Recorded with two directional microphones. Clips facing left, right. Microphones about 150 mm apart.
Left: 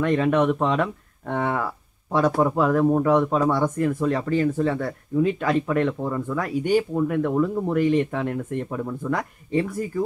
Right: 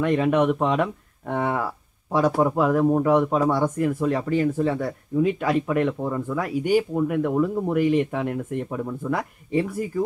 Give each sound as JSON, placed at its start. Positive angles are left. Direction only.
{"t": 0.0, "sound": "speech", "side_deg": -15}